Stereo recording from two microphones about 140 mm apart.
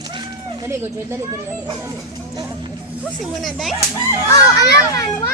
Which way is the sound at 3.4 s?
Centre (ahead or behind).